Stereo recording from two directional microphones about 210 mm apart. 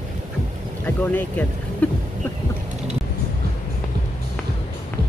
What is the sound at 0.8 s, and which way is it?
Speech, 10° left (ahead or behind).